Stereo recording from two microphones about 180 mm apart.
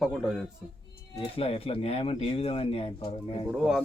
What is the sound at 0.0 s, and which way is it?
Speech, centre (ahead or behind).